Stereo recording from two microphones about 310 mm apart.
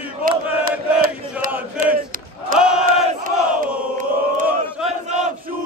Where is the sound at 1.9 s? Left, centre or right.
Right.